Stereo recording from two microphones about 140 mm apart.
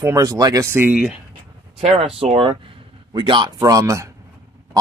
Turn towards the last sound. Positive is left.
turn(degrees=-20)  # may be behind; listen again after turning